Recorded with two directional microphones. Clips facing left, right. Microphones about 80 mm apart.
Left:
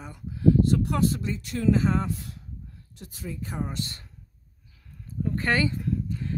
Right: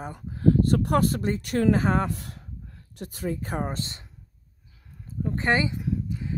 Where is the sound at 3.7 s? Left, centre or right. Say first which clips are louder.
Even; right.